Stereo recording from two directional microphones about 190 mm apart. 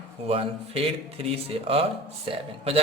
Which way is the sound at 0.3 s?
30° right (ahead or behind).